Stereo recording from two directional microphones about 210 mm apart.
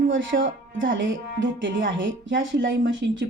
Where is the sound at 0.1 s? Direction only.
65° right (ahead or behind).